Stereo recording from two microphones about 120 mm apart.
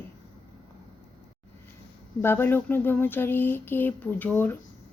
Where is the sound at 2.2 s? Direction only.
15° left (ahead or behind).